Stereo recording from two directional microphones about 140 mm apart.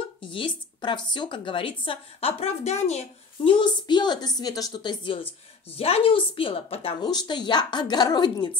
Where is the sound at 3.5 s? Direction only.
35° left (ahead or behind).